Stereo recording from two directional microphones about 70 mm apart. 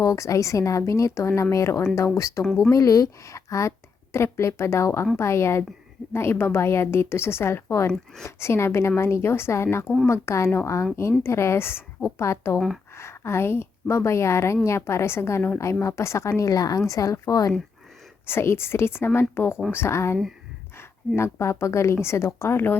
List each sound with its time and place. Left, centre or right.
0.0 s a woman's voice: left
2.4 s speech: centre
2.6 s a woman's voice: left
12.5 s speech: centre
13.0 s a woman's voice: left
16.4 s a woman's voice: left
18.3 s a woman's voice: left
21.2 s a woman's voice: left